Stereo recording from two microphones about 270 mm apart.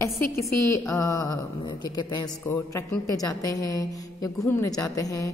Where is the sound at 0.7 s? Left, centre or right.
Centre.